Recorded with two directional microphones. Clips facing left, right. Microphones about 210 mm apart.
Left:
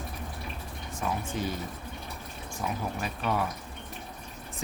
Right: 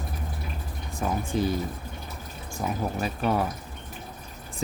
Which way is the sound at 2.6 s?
30° right (ahead or behind).